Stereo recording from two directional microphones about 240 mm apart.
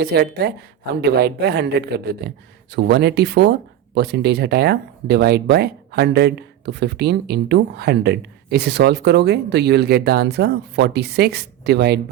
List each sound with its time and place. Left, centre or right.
0.0 s speech: right